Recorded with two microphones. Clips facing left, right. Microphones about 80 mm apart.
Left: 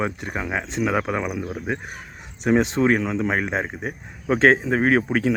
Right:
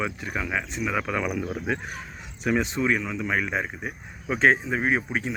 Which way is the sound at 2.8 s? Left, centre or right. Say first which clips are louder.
Left 6 dB; left.